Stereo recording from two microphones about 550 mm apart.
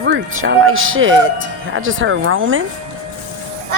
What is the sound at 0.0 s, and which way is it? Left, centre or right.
Speech, centre.